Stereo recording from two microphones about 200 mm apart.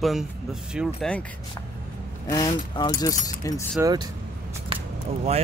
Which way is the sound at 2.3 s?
20° left (ahead or behind).